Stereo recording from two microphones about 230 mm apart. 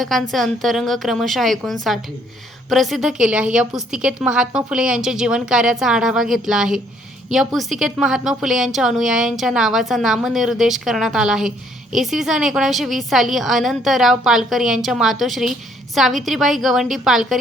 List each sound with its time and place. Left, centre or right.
0.0 s a woman's voice: centre